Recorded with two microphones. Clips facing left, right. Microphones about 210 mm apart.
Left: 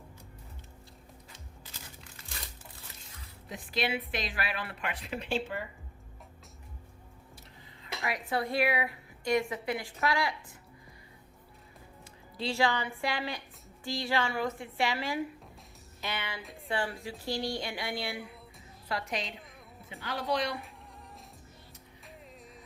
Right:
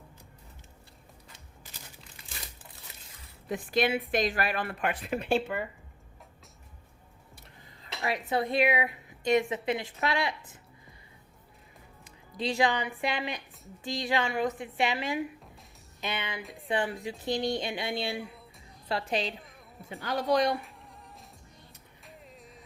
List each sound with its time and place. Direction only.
3.5 s a woman's voice: 50° right (ahead or behind)
8.0 s a woman's voice: 25° right (ahead or behind)
12.4 s a woman's voice: 15° right (ahead or behind)
16.0 s music: 20° right (ahead or behind)
16.6 s a woman's voice: 20° right (ahead or behind)
20.1 s a woman's voice: 40° right (ahead or behind)